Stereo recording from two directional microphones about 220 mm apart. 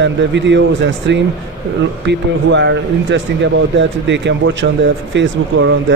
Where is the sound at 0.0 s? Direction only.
55° right (ahead or behind).